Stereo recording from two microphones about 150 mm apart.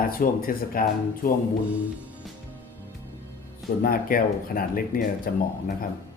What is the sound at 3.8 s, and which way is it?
Speech, 75° left (ahead or behind).